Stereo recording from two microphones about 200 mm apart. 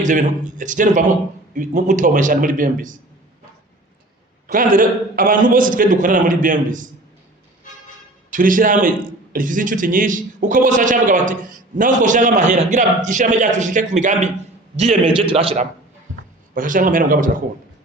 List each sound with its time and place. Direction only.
0.0 s a man's voice: 40° right (ahead or behind)
4.4 s a man's voice: 45° right (ahead or behind)
8.3 s a man's voice: 45° right (ahead or behind)
16.6 s a man's voice: 40° right (ahead or behind)